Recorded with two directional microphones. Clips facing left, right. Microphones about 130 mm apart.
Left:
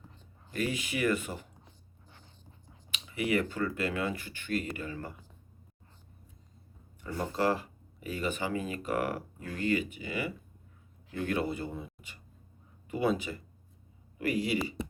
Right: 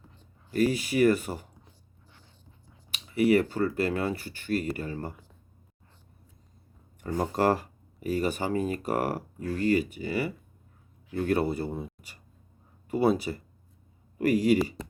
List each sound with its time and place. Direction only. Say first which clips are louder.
0.5 s speech: right 8 dB; 35° right (ahead or behind)
2.9 s speech: right 8 dB; 40° right (ahead or behind)
7.0 s speech: right 5 dB; 45° right (ahead or behind)